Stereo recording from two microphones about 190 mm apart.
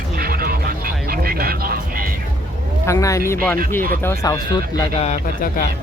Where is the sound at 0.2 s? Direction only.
50° right (ahead or behind).